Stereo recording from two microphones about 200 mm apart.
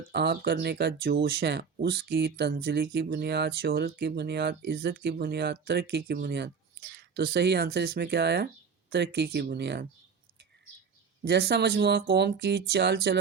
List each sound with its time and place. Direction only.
0.1 s speech: 55° right (ahead or behind)
11.3 s speech: 55° right (ahead or behind)